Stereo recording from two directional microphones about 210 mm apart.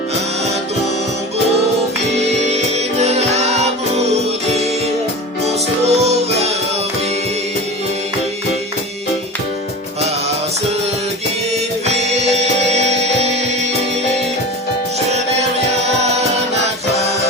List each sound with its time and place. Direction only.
2.1 s music: 30° right (ahead or behind)
5.9 s music: 30° right (ahead or behind)
11.5 s music: 30° right (ahead or behind)